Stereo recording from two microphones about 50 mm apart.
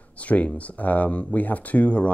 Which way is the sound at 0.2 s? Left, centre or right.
Left.